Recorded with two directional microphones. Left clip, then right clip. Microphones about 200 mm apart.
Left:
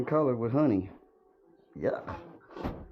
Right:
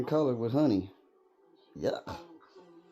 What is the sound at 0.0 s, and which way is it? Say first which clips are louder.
Speech: left 1 dB; 15° right (ahead or behind).